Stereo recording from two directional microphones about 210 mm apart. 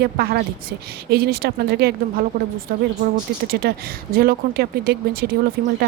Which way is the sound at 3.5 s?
45° right (ahead or behind).